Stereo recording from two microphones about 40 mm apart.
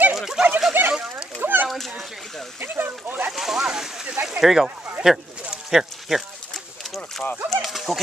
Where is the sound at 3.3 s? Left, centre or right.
Centre.